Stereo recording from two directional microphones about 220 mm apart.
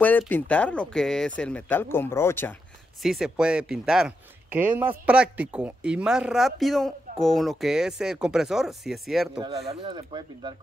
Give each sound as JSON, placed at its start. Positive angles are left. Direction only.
{"t": 0.0, "sound": "speech", "side_deg": 10}
{"t": 3.0, "sound": "a man's voice", "side_deg": 0}
{"t": 9.7, "sound": "speech", "side_deg": -25}